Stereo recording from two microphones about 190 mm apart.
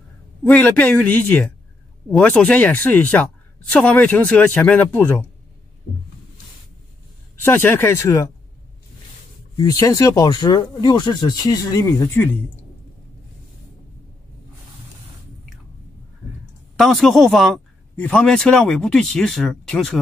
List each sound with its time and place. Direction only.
0.4 s a woman's voice: 10° left (ahead or behind)
7.4 s a woman's voice: 10° left (ahead or behind)
9.6 s speech: 20° left (ahead or behind)
16.7 s speech: centre (ahead or behind)